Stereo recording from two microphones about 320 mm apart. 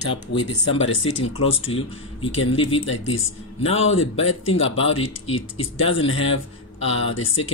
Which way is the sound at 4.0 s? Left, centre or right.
Left.